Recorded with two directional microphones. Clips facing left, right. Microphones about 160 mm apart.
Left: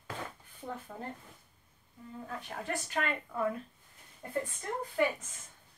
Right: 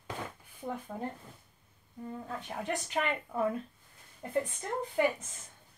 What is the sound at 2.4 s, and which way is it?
A woman's voice, 20° right (ahead or behind).